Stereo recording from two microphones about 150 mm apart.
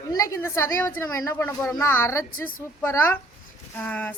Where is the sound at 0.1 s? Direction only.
20° left (ahead or behind).